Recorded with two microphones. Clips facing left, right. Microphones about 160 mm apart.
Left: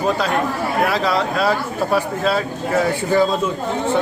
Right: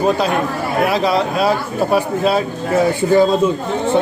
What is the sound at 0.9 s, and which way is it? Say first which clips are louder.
Speech: right 3 dB; 15° right (ahead or behind).